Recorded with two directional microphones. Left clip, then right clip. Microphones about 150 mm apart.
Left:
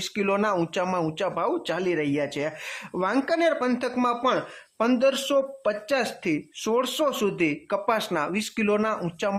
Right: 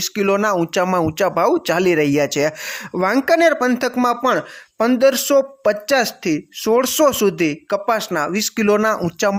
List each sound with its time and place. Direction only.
0.0 s speech: 30° right (ahead or behind)